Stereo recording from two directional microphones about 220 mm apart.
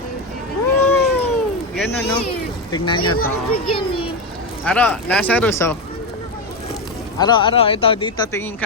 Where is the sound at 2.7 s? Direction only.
20° left (ahead or behind).